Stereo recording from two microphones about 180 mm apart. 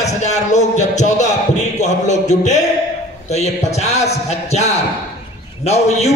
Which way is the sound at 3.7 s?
40° left (ahead or behind).